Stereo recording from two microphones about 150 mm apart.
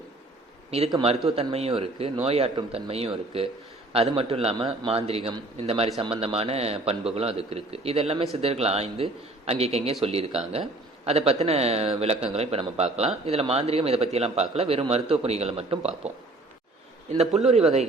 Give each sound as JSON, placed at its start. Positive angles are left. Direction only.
{"t": 1.4, "sound": "a man's voice", "side_deg": -45}
{"t": 17.5, "sound": "a man's voice", "side_deg": -45}